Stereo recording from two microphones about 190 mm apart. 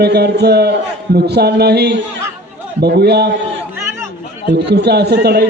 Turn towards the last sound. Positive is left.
turn(degrees=-60)  # may be behind; listen again after turning